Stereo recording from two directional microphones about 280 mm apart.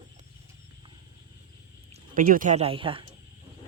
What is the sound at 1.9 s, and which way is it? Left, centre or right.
Speech, right.